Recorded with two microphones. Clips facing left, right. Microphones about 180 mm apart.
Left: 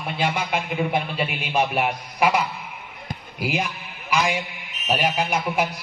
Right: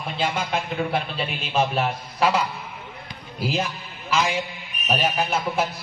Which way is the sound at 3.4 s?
15° left (ahead or behind).